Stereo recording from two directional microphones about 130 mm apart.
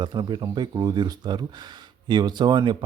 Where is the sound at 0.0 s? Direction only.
35° right (ahead or behind).